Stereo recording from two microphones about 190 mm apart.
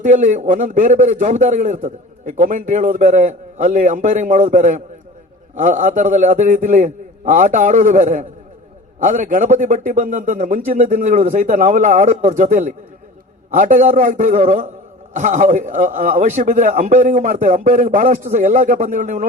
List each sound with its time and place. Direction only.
0.0 s a man's voice: 40° right (ahead or behind)